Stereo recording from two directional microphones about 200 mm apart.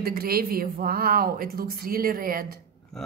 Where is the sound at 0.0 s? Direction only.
50° right (ahead or behind).